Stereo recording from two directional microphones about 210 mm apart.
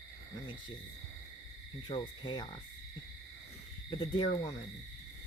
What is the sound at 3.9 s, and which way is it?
Speech, 20° left (ahead or behind).